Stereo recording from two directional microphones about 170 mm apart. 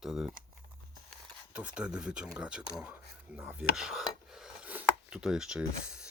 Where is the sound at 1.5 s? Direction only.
5° right (ahead or behind).